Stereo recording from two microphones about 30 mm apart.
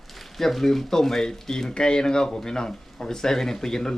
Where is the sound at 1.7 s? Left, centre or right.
Left.